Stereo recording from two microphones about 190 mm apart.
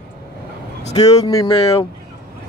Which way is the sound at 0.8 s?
35° left (ahead or behind).